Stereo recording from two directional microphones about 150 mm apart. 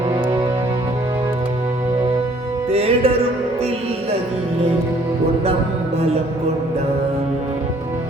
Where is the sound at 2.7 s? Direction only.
45° right (ahead or behind).